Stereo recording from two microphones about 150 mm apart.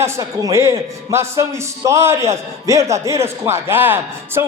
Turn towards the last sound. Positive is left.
turn(degrees=-15)  # may be behind; listen again after turning